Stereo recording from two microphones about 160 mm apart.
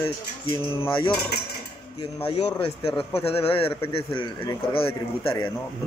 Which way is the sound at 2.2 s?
35° left (ahead or behind).